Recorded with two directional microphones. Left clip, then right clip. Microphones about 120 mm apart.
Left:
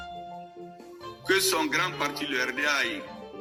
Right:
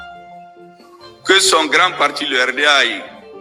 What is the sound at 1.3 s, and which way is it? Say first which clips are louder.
A man's voice: right 13 dB; 15° left (ahead or behind).